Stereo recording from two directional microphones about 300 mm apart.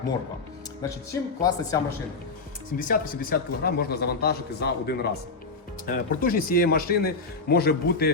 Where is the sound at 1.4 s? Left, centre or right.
Centre.